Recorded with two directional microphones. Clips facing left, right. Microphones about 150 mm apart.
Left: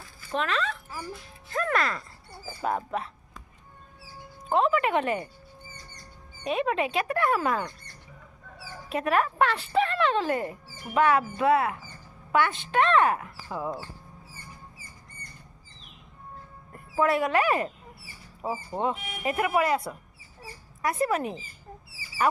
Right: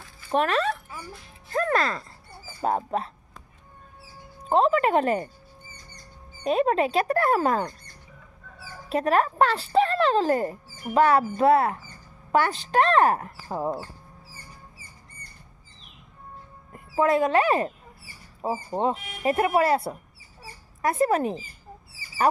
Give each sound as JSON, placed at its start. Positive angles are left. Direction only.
{"t": 0.3, "sound": "speech", "side_deg": -45}
{"t": 4.4, "sound": "speech", "side_deg": -35}
{"t": 6.4, "sound": "speech", "side_deg": -40}
{"t": 8.9, "sound": "speech", "side_deg": -35}
{"t": 14.3, "sound": "a sound", "side_deg": -30}
{"t": 16.9, "sound": "speech", "side_deg": -25}